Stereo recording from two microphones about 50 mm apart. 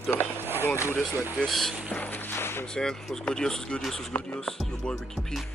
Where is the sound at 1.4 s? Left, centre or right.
Centre.